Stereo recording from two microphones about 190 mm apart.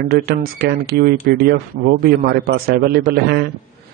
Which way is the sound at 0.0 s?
50° right (ahead or behind).